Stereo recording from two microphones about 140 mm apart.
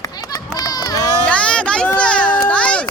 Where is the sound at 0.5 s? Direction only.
25° left (ahead or behind).